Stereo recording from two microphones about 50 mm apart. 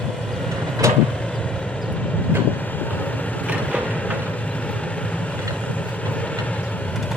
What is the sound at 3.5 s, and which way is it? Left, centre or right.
Train, right.